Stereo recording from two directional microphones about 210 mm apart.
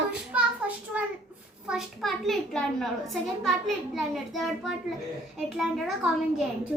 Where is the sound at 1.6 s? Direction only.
Centre (ahead or behind).